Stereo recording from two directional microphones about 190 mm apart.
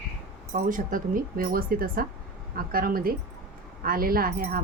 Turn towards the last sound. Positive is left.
turn(degrees=-50)  # may be behind; listen again after turning